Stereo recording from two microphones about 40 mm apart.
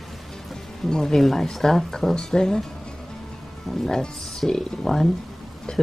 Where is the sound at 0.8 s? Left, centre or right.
Centre.